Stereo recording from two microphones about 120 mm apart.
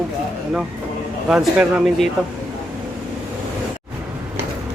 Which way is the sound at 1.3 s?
10° right (ahead or behind).